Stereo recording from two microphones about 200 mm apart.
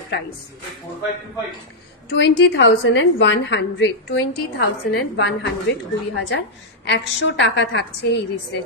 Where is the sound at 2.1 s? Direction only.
60° left (ahead or behind).